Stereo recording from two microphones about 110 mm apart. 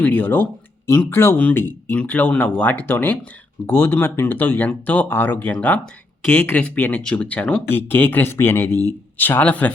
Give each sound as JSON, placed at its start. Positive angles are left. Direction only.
{"t": 0.0, "sound": "speech", "side_deg": 15}